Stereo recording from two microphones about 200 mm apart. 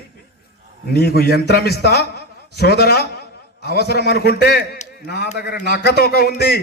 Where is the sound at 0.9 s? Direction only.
50° left (ahead or behind).